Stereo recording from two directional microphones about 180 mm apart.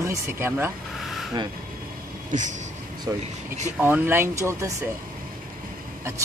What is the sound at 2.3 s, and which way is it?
Speech, 45° right (ahead or behind).